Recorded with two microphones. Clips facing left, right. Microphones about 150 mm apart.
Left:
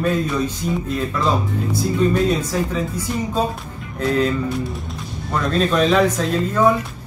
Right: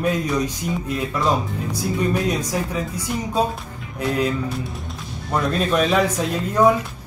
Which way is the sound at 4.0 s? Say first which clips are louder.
Left 3 dB; 10° right (ahead or behind).